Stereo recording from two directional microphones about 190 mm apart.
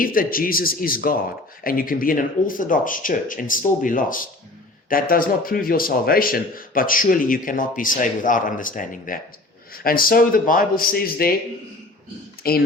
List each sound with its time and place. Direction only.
0.0 s speech: 50° left (ahead or behind)
12.4 s speech: 50° left (ahead or behind)